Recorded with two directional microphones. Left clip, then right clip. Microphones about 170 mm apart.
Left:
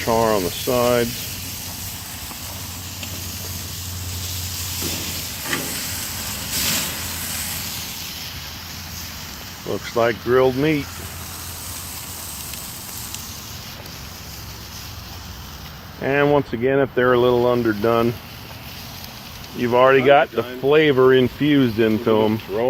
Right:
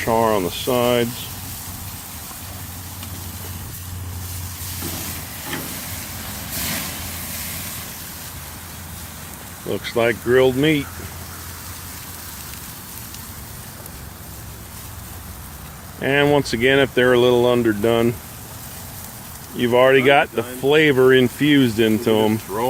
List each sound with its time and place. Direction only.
0.0 s speech: 20° right (ahead or behind)
9.6 s speech: 20° right (ahead or behind)
16.0 s speech: 30° right (ahead or behind)
19.5 s speech: 25° right (ahead or behind)